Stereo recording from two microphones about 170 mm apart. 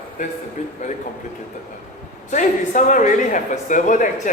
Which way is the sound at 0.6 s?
40° left (ahead or behind).